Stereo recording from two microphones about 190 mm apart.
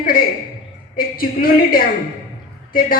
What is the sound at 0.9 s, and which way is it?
A man's voice, 50° left (ahead or behind).